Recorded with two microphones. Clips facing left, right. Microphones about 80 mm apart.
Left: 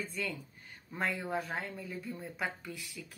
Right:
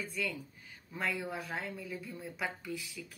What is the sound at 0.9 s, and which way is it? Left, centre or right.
Speech, left.